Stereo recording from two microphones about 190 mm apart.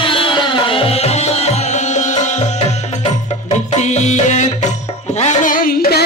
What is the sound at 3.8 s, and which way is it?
Music, 40° left (ahead or behind).